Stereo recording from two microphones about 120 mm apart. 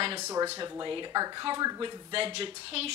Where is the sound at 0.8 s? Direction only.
40° right (ahead or behind).